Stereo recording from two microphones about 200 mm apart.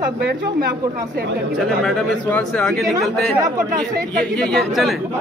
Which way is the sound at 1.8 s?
Centre (ahead or behind).